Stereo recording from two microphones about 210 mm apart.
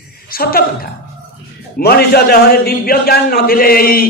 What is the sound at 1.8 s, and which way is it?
A man's voice, 50° left (ahead or behind).